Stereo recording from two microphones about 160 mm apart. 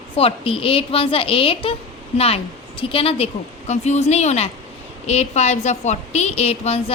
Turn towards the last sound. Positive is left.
turn(degrees=40)  # may be behind; listen again after turning